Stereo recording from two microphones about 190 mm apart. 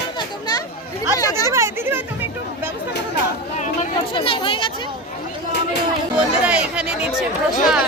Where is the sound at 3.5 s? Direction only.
40° left (ahead or behind).